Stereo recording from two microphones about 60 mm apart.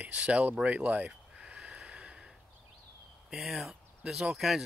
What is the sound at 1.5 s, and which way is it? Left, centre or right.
Snort, centre.